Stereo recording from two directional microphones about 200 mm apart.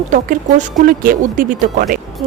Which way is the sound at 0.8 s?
45° right (ahead or behind).